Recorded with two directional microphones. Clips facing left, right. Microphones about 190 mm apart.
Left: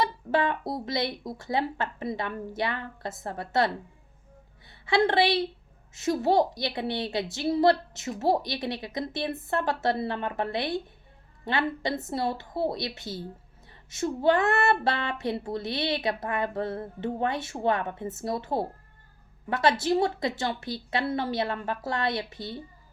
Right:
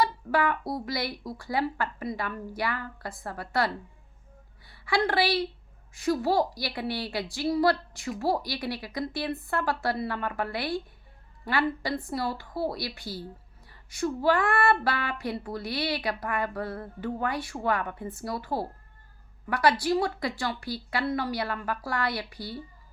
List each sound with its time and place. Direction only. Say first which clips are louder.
0.0 s speech: even; 25° left (ahead or behind)
4.7 s a woman's voice: left 3 dB; 25° left (ahead or behind)